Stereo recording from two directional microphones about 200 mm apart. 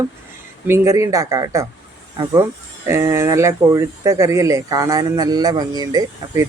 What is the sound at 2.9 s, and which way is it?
Speech, 15° right (ahead or behind).